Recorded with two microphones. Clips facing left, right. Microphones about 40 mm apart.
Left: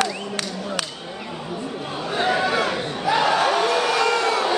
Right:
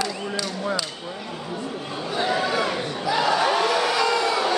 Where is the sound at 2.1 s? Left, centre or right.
Left.